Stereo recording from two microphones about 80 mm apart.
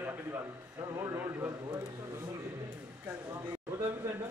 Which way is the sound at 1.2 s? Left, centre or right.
Right.